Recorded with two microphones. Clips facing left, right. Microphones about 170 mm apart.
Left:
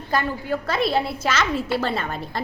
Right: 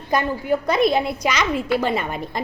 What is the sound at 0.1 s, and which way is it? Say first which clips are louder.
A woman's voice: right 4 dB; 20° right (ahead or behind).